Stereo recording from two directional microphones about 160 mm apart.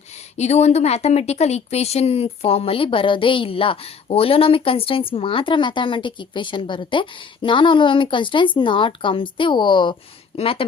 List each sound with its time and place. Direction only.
0.3 s a woman's voice: 45° left (ahead or behind)